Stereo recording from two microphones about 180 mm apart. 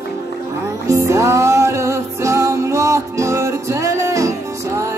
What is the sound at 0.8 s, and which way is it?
Music, 15° right (ahead or behind).